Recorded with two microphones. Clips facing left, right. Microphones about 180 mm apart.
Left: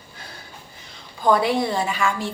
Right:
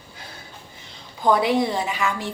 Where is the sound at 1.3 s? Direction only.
20° right (ahead or behind).